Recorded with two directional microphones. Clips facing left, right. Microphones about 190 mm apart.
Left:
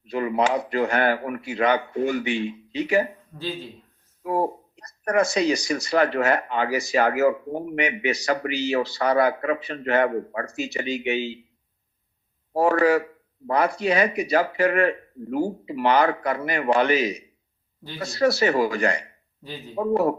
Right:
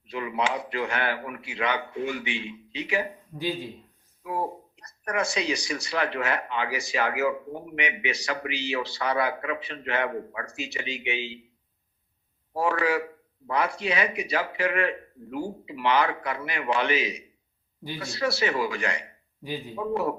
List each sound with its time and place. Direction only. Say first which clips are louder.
0.0 s speech: left 6 dB; 45° left (ahead or behind)
3.3 s speech: right 2 dB; 15° right (ahead or behind)
4.2 s speech: left 6 dB; 45° left (ahead or behind)
12.5 s speech: left 6 dB; 45° left (ahead or behind)
19.4 s speech: right 3 dB; 15° right (ahead or behind)
19.7 s speech: left 7 dB; 45° left (ahead or behind)